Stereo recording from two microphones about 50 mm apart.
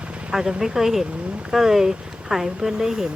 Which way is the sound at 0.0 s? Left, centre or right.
Right.